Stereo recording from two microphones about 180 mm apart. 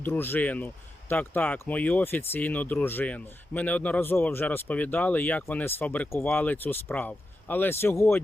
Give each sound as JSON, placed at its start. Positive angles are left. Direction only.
{"t": 0.0, "sound": "speech", "side_deg": 10}